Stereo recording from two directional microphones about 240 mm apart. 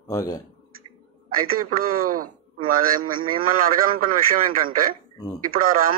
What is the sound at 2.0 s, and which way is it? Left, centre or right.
Speech, right.